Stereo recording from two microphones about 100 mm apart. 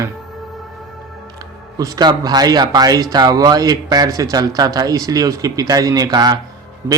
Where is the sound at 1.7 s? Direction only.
35° right (ahead or behind).